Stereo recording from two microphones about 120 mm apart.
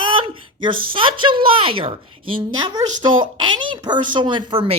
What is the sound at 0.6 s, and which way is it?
Speech, 45° right (ahead or behind).